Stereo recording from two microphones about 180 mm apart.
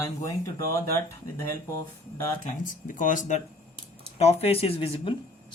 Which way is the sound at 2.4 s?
45° left (ahead or behind).